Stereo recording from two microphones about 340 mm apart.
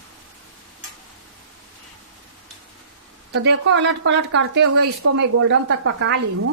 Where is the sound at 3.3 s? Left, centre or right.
Right.